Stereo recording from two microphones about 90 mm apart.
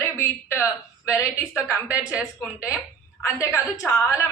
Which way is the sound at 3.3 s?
35° left (ahead or behind).